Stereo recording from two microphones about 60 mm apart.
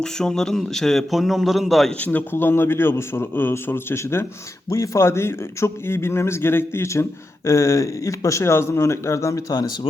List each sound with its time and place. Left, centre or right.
0.0 s a man's voice: centre
2.1 s a man's voice: left
6.8 s speech: left